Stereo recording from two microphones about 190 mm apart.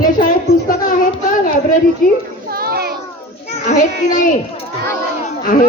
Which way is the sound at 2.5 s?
55° right (ahead or behind).